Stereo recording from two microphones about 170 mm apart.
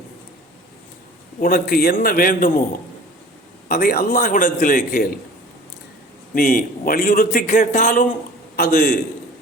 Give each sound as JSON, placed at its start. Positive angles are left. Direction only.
{"t": 1.4, "sound": "a man's voice", "side_deg": 60}
{"t": 3.7, "sound": "a man's voice", "side_deg": 60}
{"t": 6.3, "sound": "a man's voice", "side_deg": 55}